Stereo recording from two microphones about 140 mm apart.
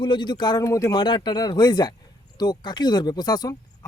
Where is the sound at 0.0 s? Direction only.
35° left (ahead or behind).